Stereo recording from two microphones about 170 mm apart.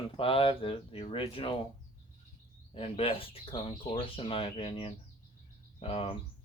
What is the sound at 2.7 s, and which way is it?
Speech, 30° left (ahead or behind).